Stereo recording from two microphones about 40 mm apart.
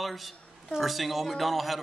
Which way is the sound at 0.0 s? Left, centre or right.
Centre.